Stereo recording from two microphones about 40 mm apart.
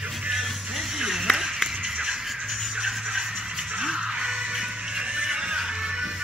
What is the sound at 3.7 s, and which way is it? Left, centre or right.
Music, centre.